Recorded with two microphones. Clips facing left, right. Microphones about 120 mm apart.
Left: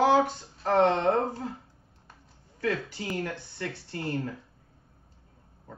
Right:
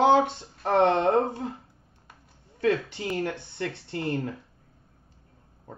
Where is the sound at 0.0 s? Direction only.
25° right (ahead or behind).